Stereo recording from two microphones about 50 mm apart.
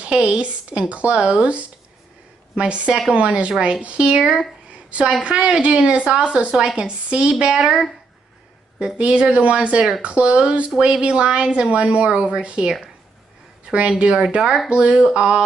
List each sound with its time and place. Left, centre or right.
0.0 s a woman's voice: right
4.1 s speech: centre
4.6 s a sound: right
5.2 s a woman's voice: centre
8.9 s a woman's voice: right
14.7 s a woman's voice: centre